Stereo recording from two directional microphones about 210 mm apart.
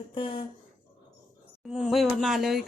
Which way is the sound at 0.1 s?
25° left (ahead or behind).